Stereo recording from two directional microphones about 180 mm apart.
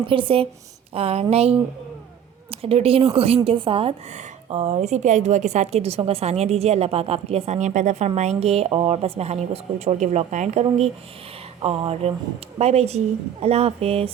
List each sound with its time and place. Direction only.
0.0 s a woman's voice: 30° right (ahead or behind)